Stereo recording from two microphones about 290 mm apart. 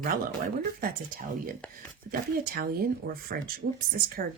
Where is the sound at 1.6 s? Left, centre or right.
Centre.